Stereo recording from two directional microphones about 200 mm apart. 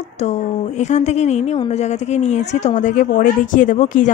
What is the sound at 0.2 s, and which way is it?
Speech, 35° left (ahead or behind).